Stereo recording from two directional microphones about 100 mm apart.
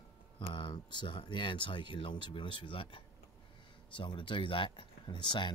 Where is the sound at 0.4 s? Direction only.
55° left (ahead or behind).